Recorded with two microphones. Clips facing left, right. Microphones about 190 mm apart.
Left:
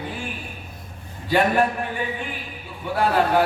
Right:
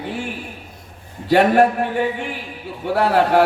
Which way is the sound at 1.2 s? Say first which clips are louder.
Right 6 dB; 70° right (ahead or behind).